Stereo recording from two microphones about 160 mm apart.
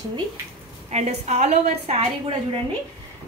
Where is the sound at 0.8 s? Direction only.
45° right (ahead or behind).